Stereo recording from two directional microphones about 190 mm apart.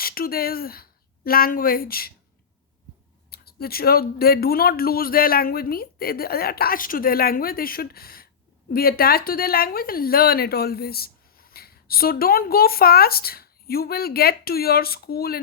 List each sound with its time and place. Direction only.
0.0 s speech: 50° left (ahead or behind)
3.2 s a woman's voice: 55° left (ahead or behind)